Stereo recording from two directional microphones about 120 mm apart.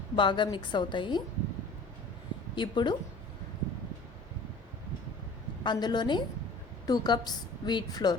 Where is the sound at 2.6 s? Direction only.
40° left (ahead or behind).